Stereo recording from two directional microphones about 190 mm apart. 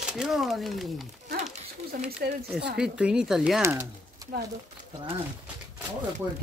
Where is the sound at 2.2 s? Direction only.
55° right (ahead or behind).